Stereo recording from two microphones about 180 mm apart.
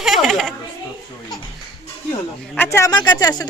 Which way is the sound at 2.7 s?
15° left (ahead or behind).